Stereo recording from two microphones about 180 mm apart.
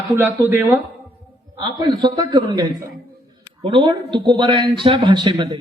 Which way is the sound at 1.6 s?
25° right (ahead or behind).